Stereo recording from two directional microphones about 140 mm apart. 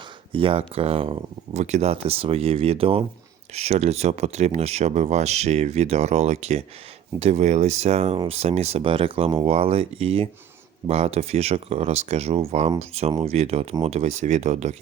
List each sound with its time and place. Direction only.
0.3 s speech: 40° right (ahead or behind)